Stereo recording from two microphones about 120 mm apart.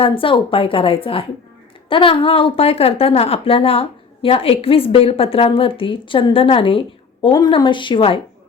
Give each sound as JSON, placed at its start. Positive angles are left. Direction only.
{"t": 0.0, "sound": "speech", "side_deg": 45}